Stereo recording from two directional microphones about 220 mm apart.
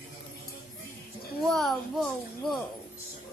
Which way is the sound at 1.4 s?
Centre (ahead or behind).